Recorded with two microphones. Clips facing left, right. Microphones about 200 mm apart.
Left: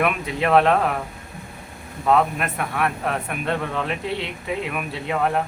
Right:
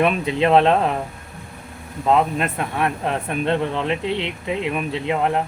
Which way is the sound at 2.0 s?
20° right (ahead or behind).